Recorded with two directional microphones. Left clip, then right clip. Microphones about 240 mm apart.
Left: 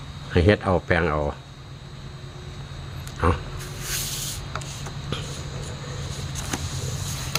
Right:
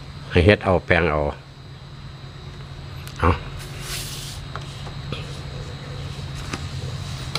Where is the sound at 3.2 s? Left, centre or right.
Centre.